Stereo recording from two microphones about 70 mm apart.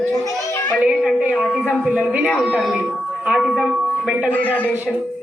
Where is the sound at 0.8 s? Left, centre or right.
Centre.